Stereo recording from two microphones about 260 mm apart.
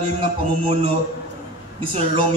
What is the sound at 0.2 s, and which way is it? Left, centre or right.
A man's voice, right.